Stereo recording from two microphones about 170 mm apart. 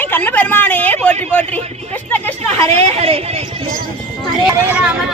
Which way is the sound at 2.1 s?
10° left (ahead or behind).